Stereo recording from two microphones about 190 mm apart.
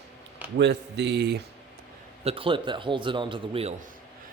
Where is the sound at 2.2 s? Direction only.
30° right (ahead or behind).